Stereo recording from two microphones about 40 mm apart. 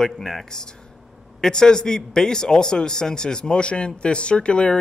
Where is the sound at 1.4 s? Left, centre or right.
Centre.